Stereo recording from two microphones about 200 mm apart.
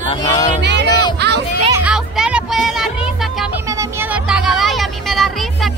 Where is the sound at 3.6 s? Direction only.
15° right (ahead or behind).